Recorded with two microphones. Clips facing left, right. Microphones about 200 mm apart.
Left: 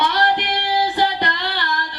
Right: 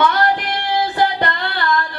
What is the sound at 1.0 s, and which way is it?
Child singing, 55° right (ahead or behind).